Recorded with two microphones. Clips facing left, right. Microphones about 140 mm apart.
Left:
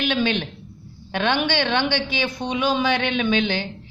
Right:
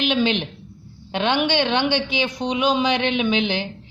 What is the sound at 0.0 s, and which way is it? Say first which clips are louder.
A woman's voice: right 2 dB; 15° right (ahead or behind).